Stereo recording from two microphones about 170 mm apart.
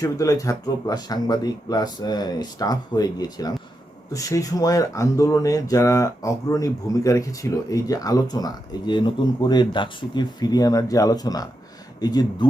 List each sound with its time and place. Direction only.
0.0 s speech: 20° left (ahead or behind)